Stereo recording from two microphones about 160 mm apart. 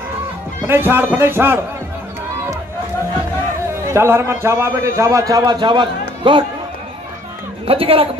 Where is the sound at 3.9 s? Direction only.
15° right (ahead or behind).